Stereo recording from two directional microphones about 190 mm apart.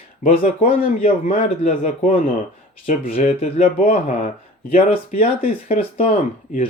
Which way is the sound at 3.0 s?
35° left (ahead or behind).